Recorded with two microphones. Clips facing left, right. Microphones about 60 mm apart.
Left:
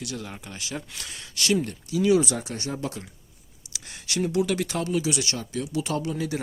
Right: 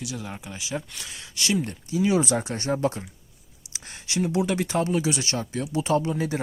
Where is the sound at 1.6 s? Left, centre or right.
Right.